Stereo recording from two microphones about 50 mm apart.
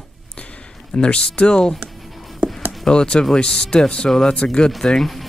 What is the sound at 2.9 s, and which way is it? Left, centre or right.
Speech, centre.